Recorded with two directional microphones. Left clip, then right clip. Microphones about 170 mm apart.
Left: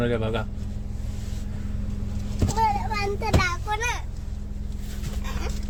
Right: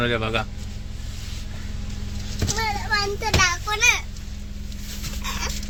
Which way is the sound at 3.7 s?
25° left (ahead or behind).